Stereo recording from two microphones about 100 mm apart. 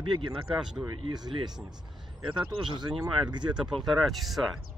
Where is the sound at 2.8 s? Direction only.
45° right (ahead or behind).